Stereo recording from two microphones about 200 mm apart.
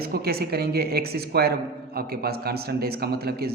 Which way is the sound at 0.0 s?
50° right (ahead or behind).